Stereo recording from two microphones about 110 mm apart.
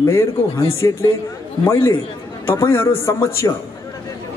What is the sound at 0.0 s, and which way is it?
A man's voice, 25° left (ahead or behind).